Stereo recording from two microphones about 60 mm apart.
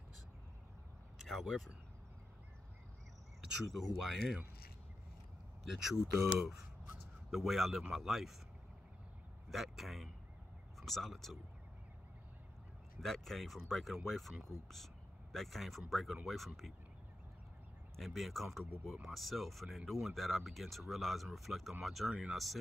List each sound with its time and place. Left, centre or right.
1.2 s speech: centre
3.5 s speech: centre
5.7 s speech: centre
7.2 s speech: centre
9.5 s speech: centre
13.0 s speech: centre
17.9 s speech: centre